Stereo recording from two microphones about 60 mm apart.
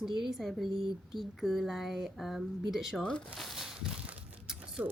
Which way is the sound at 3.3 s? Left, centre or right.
Centre.